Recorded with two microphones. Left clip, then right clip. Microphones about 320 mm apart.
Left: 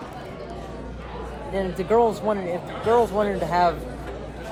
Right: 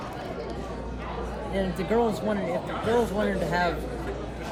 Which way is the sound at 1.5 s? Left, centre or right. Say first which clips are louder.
Left 5 dB; centre.